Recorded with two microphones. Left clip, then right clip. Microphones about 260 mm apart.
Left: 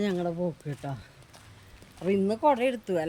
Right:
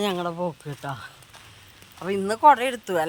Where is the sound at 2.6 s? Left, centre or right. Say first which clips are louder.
Right 3 dB; centre.